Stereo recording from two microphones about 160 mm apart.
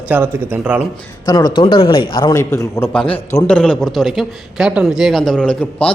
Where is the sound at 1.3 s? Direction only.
25° left (ahead or behind).